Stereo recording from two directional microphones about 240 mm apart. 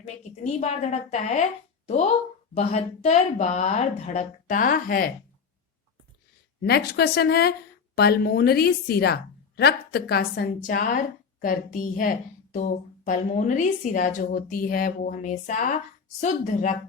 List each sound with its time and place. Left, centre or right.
0.0 s speech: left
6.6 s a woman's voice: left